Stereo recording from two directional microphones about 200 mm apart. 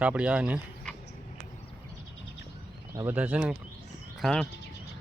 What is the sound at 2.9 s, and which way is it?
Speech, 10° right (ahead or behind).